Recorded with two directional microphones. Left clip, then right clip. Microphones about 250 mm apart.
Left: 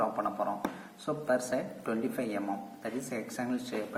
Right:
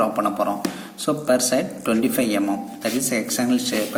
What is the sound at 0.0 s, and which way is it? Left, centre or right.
A man's voice, right.